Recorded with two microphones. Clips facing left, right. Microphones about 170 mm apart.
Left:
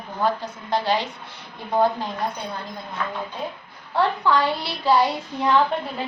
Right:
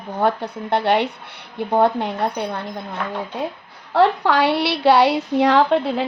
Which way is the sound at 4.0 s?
70° right (ahead or behind).